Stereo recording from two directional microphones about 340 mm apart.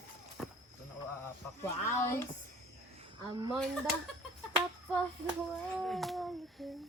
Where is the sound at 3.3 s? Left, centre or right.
Centre.